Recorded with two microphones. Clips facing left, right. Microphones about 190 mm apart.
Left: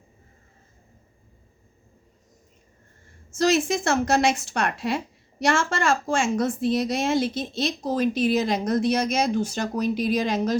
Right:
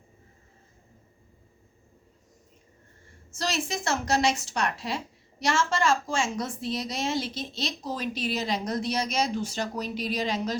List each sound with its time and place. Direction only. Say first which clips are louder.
3.3 s a woman's voice: left 10 dB; 50° left (ahead or behind)